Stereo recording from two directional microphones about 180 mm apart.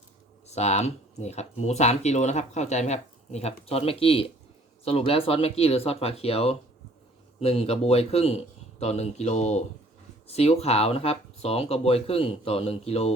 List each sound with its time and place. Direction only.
0.4 s speech: 35° left (ahead or behind)